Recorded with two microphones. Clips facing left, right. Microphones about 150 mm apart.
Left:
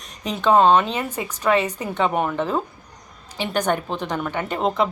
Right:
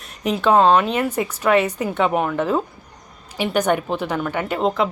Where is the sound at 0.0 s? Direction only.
5° right (ahead or behind).